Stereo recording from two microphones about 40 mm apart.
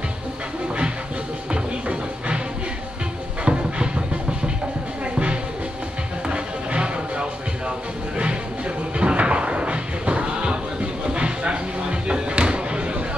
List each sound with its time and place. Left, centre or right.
1.5 s music: right
3.4 s music: right
6.2 s music: right